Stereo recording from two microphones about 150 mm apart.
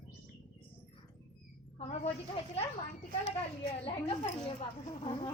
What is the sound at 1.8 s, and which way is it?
Speech, 45° left (ahead or behind).